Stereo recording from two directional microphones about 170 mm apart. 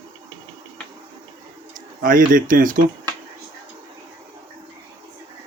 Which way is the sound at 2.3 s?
50° right (ahead or behind).